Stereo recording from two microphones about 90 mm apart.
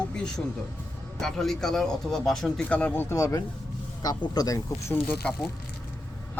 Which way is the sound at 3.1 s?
35° left (ahead or behind).